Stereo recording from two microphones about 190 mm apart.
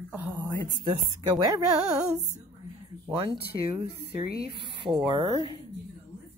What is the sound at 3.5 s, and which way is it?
Speech, 30° right (ahead or behind).